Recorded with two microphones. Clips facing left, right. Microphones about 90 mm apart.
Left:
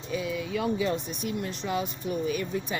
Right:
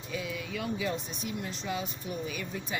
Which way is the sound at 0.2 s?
35° left (ahead or behind).